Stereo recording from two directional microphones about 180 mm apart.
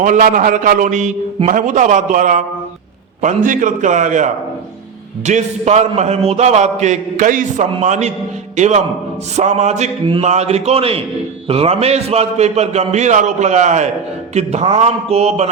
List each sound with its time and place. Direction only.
0.0 s a man's voice: 45° right (ahead or behind)